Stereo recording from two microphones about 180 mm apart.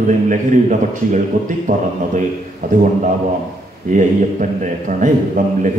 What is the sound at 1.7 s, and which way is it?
Speech, 50° right (ahead or behind).